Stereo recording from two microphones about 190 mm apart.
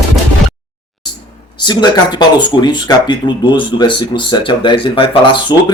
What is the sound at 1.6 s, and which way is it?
Speech, 20° left (ahead or behind).